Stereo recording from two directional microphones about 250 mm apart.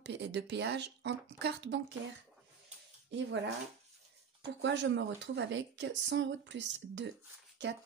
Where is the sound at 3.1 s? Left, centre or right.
Right.